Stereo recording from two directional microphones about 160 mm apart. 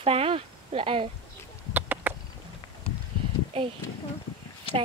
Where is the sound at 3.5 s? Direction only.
35° right (ahead or behind).